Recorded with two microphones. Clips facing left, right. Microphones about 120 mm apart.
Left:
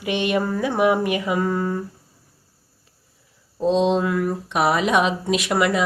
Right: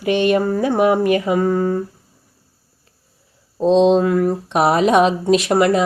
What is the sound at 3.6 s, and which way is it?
Speech, 30° right (ahead or behind).